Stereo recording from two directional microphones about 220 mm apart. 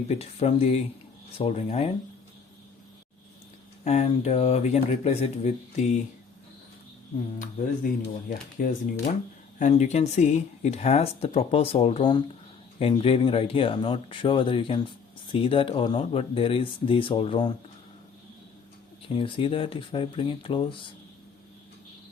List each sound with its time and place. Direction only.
0.1 s speech: 30° left (ahead or behind)
3.8 s speech: 30° left (ahead or behind)
7.3 s speech: 40° left (ahead or behind)
19.0 s speech: 25° left (ahead or behind)